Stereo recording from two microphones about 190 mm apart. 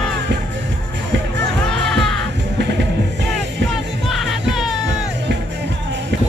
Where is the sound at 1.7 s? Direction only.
Centre (ahead or behind).